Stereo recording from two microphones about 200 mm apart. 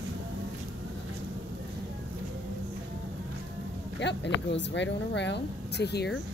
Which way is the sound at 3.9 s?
60° left (ahead or behind).